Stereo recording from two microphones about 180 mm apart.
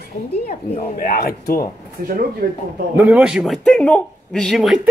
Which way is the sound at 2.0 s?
55° right (ahead or behind).